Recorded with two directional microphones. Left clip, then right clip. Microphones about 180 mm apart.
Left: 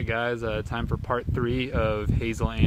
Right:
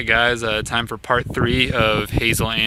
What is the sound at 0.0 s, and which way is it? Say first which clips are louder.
Speech: right 10 dB; 15° right (ahead or behind).